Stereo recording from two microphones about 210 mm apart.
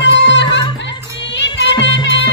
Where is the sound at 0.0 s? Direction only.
60° left (ahead or behind).